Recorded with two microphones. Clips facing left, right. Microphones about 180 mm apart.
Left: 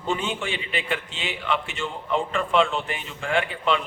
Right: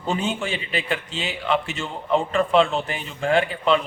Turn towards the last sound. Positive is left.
turn(degrees=-35)  # may be behind; listen again after turning